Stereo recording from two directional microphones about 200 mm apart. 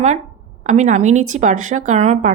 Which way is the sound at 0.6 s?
35° right (ahead or behind).